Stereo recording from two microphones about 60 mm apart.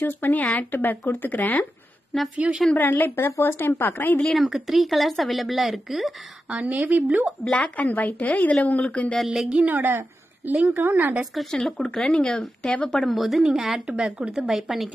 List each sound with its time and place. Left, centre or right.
0.0 s speech: left
2.3 s a woman's voice: centre
2.8 s speech: left
4.4 s speech: centre
6.5 s a woman's voice: right
7.4 s speech: left
9.3 s a woman's voice: centre
9.7 s a woman's voice: right
11.5 s a woman's voice: centre
13.8 s a woman's voice: centre